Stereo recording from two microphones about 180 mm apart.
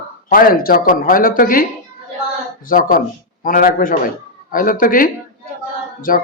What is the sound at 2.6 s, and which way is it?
Speech, 50° left (ahead or behind).